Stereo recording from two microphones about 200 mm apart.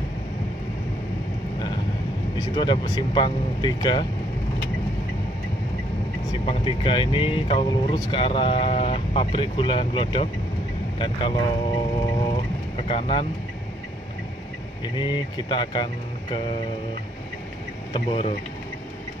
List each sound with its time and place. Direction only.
2.3 s speech: 20° left (ahead or behind)
6.4 s speech: 25° left (ahead or behind)
15.0 s speech: 25° left (ahead or behind)
17.9 s speech: 30° left (ahead or behind)